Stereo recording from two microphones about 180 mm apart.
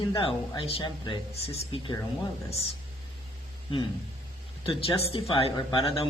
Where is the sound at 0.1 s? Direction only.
25° left (ahead or behind).